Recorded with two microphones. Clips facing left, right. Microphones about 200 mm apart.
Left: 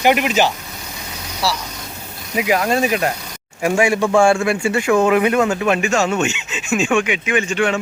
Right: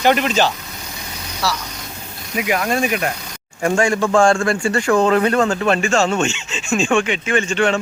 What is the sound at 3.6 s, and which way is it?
Speech, 10° left (ahead or behind).